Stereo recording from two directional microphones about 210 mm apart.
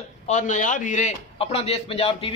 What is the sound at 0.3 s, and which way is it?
A man's voice, 35° left (ahead or behind).